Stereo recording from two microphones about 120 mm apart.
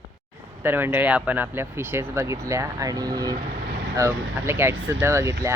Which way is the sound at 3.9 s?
20° right (ahead or behind).